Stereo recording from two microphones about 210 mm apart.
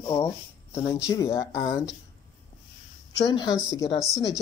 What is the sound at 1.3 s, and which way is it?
Speech, 15° left (ahead or behind).